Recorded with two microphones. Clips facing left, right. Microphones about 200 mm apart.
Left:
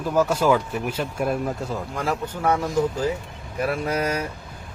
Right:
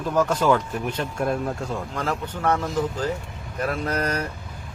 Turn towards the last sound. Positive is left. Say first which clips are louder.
# left 1 dB
turn(degrees=10)  # may be behind; listen again after turning